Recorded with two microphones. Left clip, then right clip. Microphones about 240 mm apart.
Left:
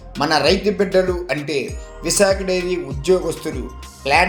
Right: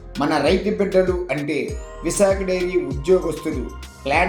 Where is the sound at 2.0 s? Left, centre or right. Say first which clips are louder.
Left 2 dB; left.